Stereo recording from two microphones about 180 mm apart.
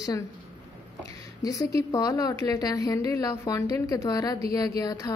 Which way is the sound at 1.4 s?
20° left (ahead or behind).